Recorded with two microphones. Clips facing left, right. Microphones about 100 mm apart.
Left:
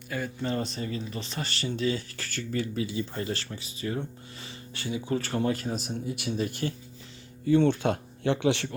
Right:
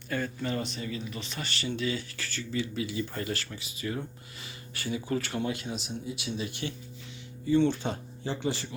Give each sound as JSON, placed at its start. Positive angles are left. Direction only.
{"t": 0.1, "sound": "speech", "side_deg": 5}
{"t": 0.4, "sound": "speech", "side_deg": 35}
{"t": 2.8, "sound": "speech", "side_deg": 30}
{"t": 4.7, "sound": "speech", "side_deg": 20}
{"t": 5.1, "sound": "speech", "side_deg": 35}
{"t": 7.4, "sound": "speech", "side_deg": 55}